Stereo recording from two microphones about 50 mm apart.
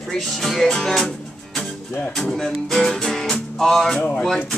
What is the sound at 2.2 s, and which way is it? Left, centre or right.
Music, centre.